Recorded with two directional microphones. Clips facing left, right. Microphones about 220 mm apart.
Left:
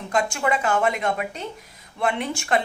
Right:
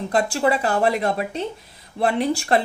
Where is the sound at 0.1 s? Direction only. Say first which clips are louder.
Right 3 dB; 35° right (ahead or behind).